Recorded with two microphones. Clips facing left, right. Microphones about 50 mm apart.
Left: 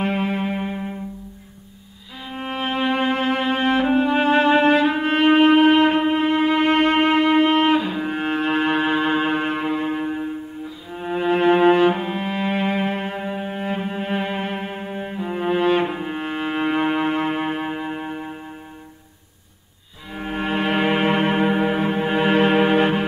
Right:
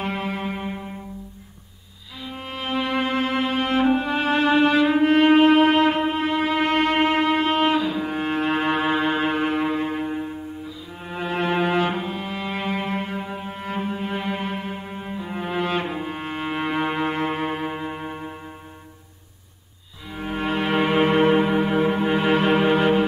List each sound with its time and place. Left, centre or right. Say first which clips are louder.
0.0 s music: left 4 dB; left
2.1 s violin: left 5 dB; left
4.0 s music: left 4 dB; left
11.4 s cello: left 7 dB; left
13.2 s cello: left 5 dB; left
15.0 s music: left 7 dB; left
15.6 s music: left 5 dB; left; by 18.3 s centre
20.1 s music: left 1 dB; centre